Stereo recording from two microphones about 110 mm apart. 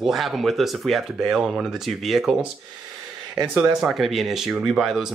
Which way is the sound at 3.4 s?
5° right (ahead or behind).